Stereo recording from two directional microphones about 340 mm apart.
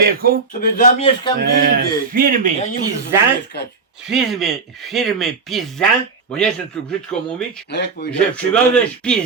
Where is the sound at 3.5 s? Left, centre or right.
Left.